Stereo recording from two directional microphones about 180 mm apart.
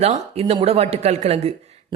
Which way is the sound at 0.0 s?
35° right (ahead or behind).